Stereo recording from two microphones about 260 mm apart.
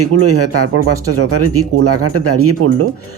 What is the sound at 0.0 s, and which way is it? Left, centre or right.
Speech, right.